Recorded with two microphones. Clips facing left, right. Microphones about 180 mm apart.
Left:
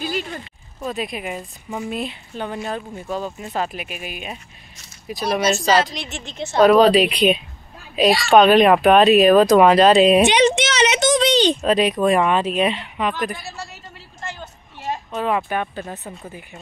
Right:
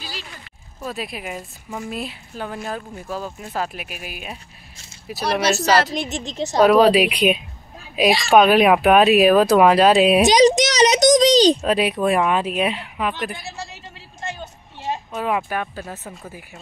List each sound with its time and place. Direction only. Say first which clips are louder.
0.0 s a sound: left 11 dB; 50° left (ahead or behind)
0.8 s a woman's voice: left 3 dB; 5° right (ahead or behind)
5.4 s speech: even; 70° right (ahead or behind)
6.1 s speech: left 2 dB; 35° right (ahead or behind)
6.6 s speech: left 1 dB; 10° right (ahead or behind)
10.2 s a sound: right 2 dB; 35° right (ahead or behind)
11.6 s speech: left 2 dB; 10° right (ahead or behind)
15.1 s a woman's voice: left 2 dB; 5° right (ahead or behind)